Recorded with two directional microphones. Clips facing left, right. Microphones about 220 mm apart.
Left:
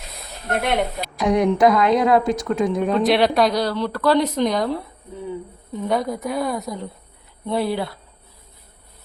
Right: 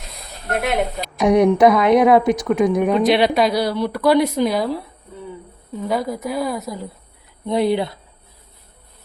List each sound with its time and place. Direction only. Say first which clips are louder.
0.5 s a woman's voice: right 1 dB; centre (ahead or behind)
1.2 s a woman's voice: right 4 dB; 20° right (ahead or behind)
3.0 s a woman's voice: left 2 dB; centre (ahead or behind)
7.4 s a woman's voice: right 4 dB; 20° right (ahead or behind)